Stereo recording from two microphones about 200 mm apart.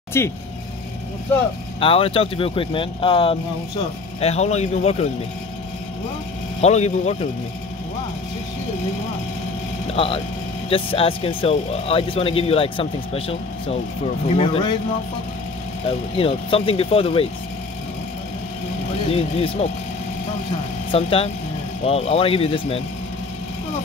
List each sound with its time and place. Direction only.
0.2 s speech: 15° left (ahead or behind)
1.8 s speech: 25° left (ahead or behind)
6.6 s speech: 35° left (ahead or behind)
9.9 s speech: 25° left (ahead or behind)
16.2 s speech: 30° left (ahead or behind)
19.0 s speech: 30° left (ahead or behind)
20.9 s speech: 30° left (ahead or behind)